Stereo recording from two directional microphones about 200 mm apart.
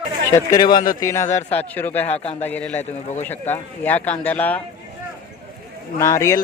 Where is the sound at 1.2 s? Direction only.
35° left (ahead or behind).